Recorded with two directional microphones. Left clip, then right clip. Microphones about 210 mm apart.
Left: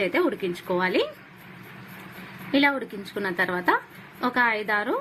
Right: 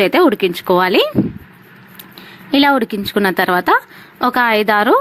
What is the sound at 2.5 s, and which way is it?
A woman's voice, 50° right (ahead or behind).